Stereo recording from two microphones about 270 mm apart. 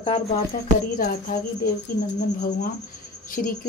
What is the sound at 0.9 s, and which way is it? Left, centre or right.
A woman's voice, left.